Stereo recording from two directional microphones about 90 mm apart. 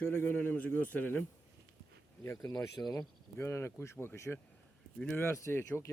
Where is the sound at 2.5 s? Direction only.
50° left (ahead or behind).